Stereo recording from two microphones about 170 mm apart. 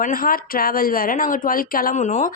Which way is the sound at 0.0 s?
55° left (ahead or behind).